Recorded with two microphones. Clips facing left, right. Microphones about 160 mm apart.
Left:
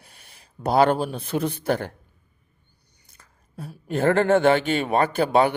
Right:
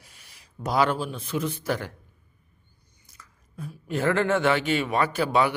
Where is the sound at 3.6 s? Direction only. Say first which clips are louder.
Left 1 dB; 35° left (ahead or behind).